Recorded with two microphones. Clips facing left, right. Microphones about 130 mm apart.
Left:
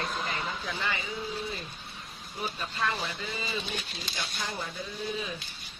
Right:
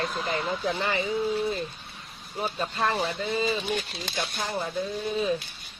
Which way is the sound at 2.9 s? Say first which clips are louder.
Right 9 dB; 65° right (ahead or behind).